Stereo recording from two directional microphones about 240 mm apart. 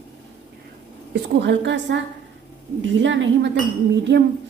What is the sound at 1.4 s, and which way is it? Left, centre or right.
A woman's voice, right.